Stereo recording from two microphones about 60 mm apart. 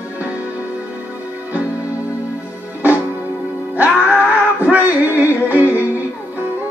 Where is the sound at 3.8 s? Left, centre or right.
Right.